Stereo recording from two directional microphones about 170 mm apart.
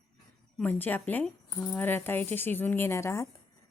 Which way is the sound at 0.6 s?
10° left (ahead or behind).